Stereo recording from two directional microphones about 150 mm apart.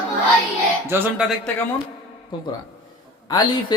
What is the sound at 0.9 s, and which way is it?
Speech, 15° right (ahead or behind).